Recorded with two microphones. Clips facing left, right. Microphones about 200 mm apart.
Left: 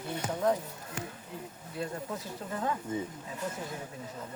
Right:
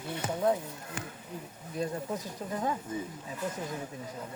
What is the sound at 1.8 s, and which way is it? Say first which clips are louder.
Speech: right 3 dB; 15° right (ahead or behind).